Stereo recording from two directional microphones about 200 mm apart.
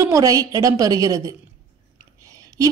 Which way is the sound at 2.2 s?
15° right (ahead or behind).